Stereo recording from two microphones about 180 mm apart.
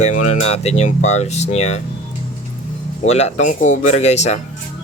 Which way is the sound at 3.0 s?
35° left (ahead or behind).